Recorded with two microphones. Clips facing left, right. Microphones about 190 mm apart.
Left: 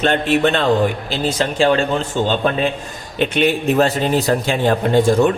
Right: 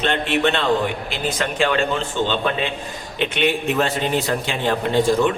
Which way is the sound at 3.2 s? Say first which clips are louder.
Left 4 dB; 40° left (ahead or behind).